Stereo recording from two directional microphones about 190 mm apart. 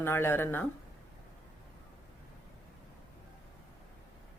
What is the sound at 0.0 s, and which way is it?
Speech, 10° left (ahead or behind).